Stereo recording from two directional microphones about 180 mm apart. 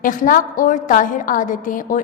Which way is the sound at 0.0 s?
45° left (ahead or behind).